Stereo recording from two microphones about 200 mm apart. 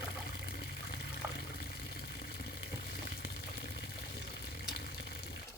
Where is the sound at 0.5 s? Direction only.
55° left (ahead or behind).